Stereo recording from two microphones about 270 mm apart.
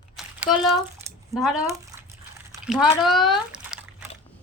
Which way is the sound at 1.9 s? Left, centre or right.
Centre.